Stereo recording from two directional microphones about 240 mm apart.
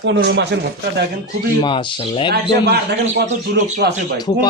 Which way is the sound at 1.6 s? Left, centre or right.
Centre.